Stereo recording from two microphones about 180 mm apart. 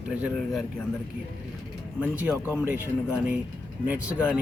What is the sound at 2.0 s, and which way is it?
Speech, 10° right (ahead or behind).